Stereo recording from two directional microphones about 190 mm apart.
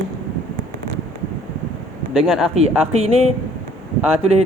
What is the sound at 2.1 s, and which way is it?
Speech, centre (ahead or behind).